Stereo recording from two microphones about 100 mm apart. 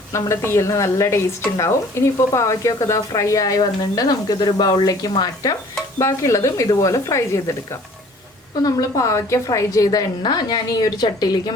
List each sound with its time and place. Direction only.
0.1 s a woman's voice: 25° left (ahead or behind); by 11.5 s 45° left (ahead or behind)